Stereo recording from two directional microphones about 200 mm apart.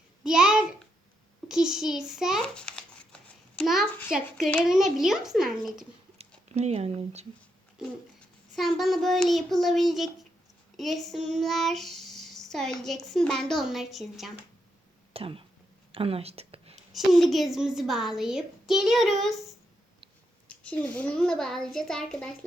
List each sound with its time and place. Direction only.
0.3 s a sound: 5° right (ahead or behind)
1.5 s shuffling cards: 5° right (ahead or behind)
4.4 s a child's voice: centre (ahead or behind)
6.1 s speech: 35° right (ahead or behind)
8.5 s a child's voice: centre (ahead or behind)
15.1 s speech: 30° right (ahead or behind)
15.9 s a sound: 30° right (ahead or behind)
16.9 s a child's voice: centre (ahead or behind)
20.5 s a child's voice: 5° left (ahead or behind)